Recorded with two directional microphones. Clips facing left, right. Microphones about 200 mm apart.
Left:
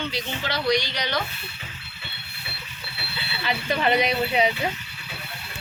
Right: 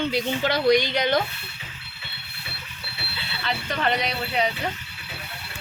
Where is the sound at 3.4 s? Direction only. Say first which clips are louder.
Left 2 dB; 10° left (ahead or behind).